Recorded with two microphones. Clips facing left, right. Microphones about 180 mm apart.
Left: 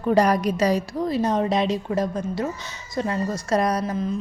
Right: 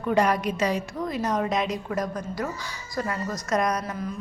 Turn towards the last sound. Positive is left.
turn(degrees=30)  # may be behind; listen again after turning